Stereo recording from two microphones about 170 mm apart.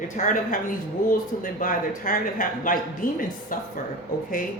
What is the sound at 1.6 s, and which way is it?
Speech, 50° left (ahead or behind).